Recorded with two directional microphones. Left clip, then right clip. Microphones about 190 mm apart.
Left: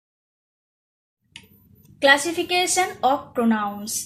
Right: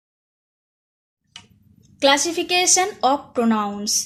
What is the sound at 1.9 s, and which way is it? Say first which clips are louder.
Speech: even; 45° right (ahead or behind).